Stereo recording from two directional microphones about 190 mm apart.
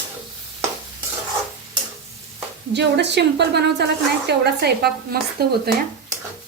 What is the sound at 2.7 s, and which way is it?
A woman's voice, 65° right (ahead or behind).